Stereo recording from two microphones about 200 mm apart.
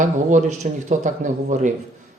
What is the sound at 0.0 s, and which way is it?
Speech, 40° right (ahead or behind).